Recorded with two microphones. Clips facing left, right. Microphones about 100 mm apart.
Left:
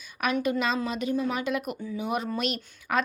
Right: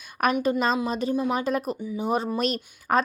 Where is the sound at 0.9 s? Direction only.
35° right (ahead or behind).